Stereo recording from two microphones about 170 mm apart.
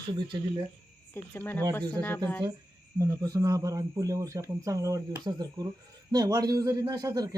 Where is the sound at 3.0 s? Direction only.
20° right (ahead or behind).